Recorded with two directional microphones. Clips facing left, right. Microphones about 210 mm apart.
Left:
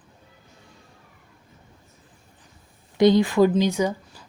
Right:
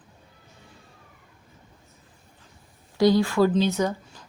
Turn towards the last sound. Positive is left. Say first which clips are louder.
# left 1 dB
turn(degrees=10)  # may be behind; listen again after turning